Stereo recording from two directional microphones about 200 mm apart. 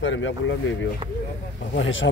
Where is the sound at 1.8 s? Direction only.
70° left (ahead or behind).